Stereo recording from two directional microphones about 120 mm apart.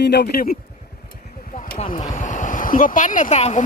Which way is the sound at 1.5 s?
75° left (ahead or behind).